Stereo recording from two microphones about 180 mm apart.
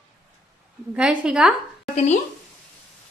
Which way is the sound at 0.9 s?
5° right (ahead or behind).